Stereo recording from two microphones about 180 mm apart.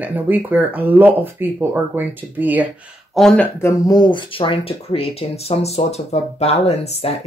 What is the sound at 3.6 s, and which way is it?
Speech, 20° left (ahead or behind).